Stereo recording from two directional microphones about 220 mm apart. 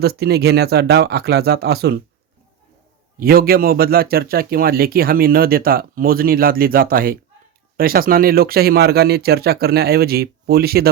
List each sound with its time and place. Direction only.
0.0 s a man's voice: 45° right (ahead or behind)
3.2 s a man's voice: 45° right (ahead or behind)